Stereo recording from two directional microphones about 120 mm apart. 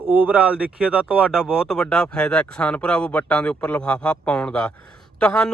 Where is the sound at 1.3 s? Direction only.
Centre (ahead or behind).